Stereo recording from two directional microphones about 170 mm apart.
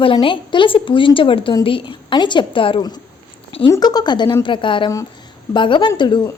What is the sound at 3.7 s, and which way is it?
Speech, 25° left (ahead or behind).